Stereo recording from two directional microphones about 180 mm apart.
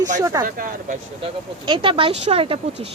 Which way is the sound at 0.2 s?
20° right (ahead or behind).